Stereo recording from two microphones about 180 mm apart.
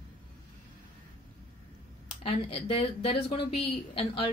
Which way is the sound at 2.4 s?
35° left (ahead or behind).